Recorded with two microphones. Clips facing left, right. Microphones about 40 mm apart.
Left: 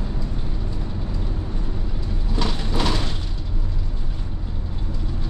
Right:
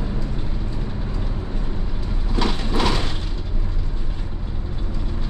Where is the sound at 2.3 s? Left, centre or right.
Centre.